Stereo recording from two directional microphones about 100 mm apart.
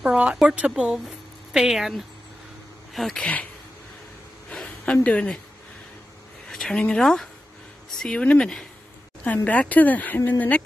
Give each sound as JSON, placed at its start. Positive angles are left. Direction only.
{"t": 0.0, "sound": "a woman's voice", "side_deg": -10}
{"t": 4.5, "sound": "a sound", "side_deg": 10}
{"t": 6.5, "sound": "speech", "side_deg": 5}